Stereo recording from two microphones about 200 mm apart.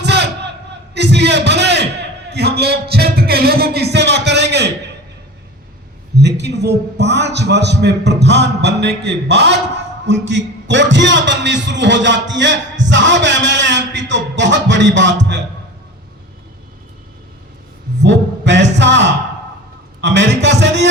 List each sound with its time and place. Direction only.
0.0 s a sound: 55° right (ahead or behind)
6.1 s a man's voice: 60° right (ahead or behind)
18.0 s a man's voice: 65° right (ahead or behind)